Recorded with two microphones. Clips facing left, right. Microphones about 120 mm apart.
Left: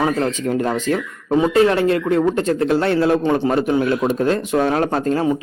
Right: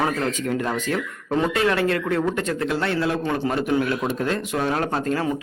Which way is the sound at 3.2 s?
25° left (ahead or behind).